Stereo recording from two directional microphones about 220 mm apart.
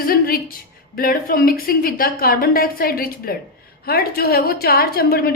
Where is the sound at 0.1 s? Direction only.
40° left (ahead or behind).